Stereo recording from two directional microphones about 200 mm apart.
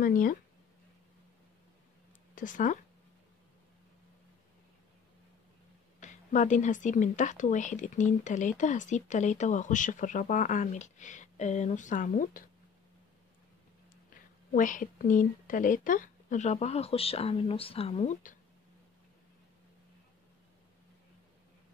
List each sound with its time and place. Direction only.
0.0 s speech: 45° left (ahead or behind)
2.3 s speech: 40° left (ahead or behind)
5.9 s speech: 40° left (ahead or behind)
14.5 s speech: 40° left (ahead or behind)